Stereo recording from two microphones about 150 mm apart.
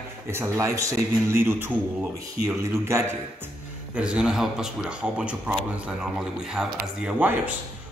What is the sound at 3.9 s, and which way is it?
A man's voice, 5° right (ahead or behind).